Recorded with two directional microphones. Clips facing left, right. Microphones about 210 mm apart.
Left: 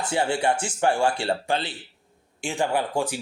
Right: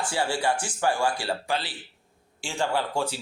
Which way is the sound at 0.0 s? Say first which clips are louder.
Left 3 dB; 20° left (ahead or behind).